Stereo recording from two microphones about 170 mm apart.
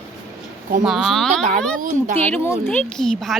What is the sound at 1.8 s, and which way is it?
Speech, 45° right (ahead or behind).